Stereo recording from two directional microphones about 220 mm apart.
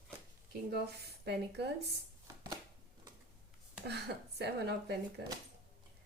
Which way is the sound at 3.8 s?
50° right (ahead or behind).